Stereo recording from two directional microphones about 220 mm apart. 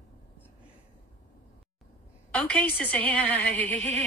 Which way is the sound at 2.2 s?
5° left (ahead or behind).